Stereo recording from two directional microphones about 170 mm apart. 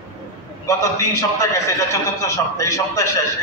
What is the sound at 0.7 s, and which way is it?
A man's voice, 20° left (ahead or behind).